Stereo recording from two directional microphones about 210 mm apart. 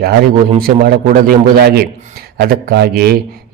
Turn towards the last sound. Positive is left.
turn(degrees=-45)  # may be behind; listen again after turning